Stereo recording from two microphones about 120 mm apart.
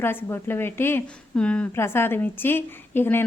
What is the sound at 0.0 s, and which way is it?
A woman's voice, 20° left (ahead or behind).